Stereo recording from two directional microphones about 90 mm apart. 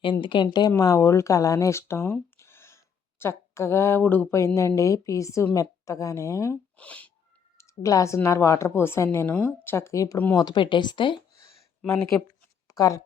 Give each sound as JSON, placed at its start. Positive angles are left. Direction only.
{"t": 0.0, "sound": "speech", "side_deg": 65}
{"t": 0.8, "sound": "speech", "side_deg": 40}
{"t": 2.4, "sound": "a sound", "side_deg": 30}
{"t": 4.3, "sound": "speech", "side_deg": 30}
{"t": 6.7, "sound": "speech", "side_deg": 15}
{"t": 7.6, "sound": "a woman's voice", "side_deg": 35}
{"t": 9.6, "sound": "speech", "side_deg": 30}
{"t": 10.3, "sound": "speech", "side_deg": 55}
{"t": 12.7, "sound": "speech", "side_deg": 40}